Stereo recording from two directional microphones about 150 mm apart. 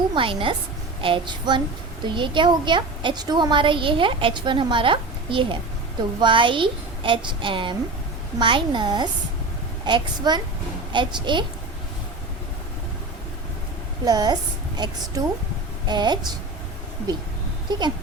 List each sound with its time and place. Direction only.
0.1 s a woman's voice: 35° right (ahead or behind)
14.0 s a woman's voice: 25° right (ahead or behind)
17.7 s speech: 30° right (ahead or behind)